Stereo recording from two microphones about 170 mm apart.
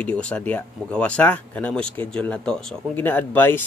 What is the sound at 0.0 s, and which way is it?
Speech, 5° left (ahead or behind).